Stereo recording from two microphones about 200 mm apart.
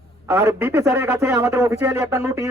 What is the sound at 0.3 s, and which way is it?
A man's voice, 10° right (ahead or behind).